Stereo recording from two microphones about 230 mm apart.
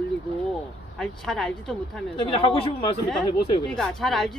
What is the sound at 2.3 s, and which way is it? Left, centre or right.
Speech, left.